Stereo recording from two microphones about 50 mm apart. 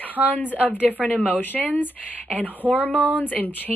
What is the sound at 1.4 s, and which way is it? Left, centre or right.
Speech, left.